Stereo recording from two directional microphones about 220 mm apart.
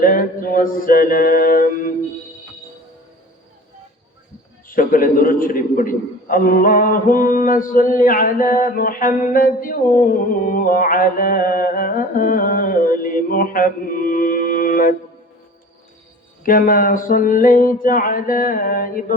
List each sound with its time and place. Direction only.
0.0 s a man's voice: 40° left (ahead or behind)
4.7 s a man's voice: 40° left (ahead or behind)
16.4 s a man's voice: 40° left (ahead or behind)